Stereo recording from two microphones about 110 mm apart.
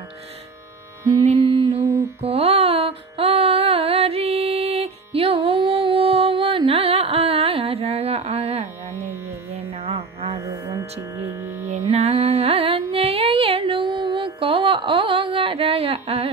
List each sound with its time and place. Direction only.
1.2 s mantra: 65° right (ahead or behind)
2.2 s music: 65° right (ahead or behind)
8.9 s music: 25° right (ahead or behind)
9.5 s music: 70° right (ahead or behind)
10.5 s music: 25° right (ahead or behind)
11.6 s carnatic music: 80° right; by 16.3 s 65° right (ahead or behind)